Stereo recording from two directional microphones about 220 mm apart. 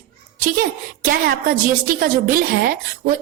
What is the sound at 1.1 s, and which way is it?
Speech, 40° right (ahead or behind).